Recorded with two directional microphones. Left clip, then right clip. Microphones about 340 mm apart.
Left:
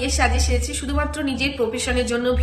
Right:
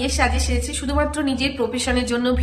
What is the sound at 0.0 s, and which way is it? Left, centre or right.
A woman's voice, centre.